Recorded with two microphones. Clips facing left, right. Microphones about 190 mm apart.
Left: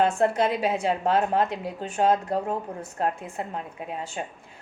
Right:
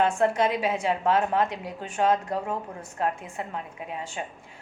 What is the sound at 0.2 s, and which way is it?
A woman's voice, 35° left (ahead or behind).